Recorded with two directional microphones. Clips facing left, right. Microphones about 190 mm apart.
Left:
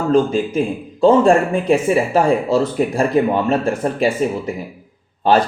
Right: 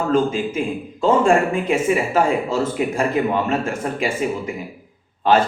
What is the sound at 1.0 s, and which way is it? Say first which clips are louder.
Speech: left 4 dB; 35° left (ahead or behind).